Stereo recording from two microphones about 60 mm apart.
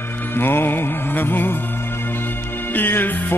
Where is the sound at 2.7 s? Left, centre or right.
Left.